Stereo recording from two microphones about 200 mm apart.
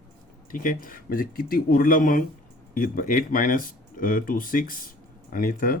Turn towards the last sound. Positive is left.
turn(degrees=45)  # may be behind; listen again after turning